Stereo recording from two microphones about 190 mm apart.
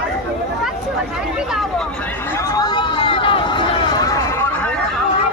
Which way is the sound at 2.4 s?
20° left (ahead or behind).